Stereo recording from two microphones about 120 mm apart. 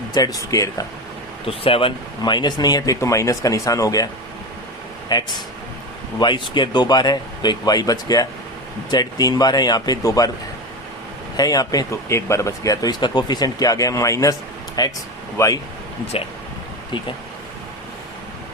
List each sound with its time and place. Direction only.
0.1 s speech: 30° left (ahead or behind)
1.5 s speech: 50° left (ahead or behind); by 4.1 s 30° left (ahead or behind)
5.1 s speech: 35° left (ahead or behind)
11.3 s speech: 30° left (ahead or behind)